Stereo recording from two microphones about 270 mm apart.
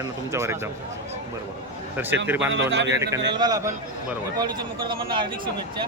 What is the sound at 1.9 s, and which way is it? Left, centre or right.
Speech, centre.